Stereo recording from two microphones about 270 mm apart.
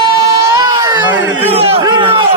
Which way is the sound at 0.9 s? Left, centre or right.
Centre.